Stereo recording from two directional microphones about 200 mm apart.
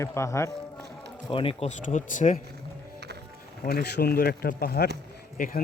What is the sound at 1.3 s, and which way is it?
Speech, 25° left (ahead or behind).